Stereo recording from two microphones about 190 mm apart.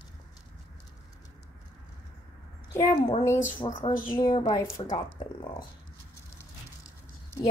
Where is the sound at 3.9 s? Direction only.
45° left (ahead or behind).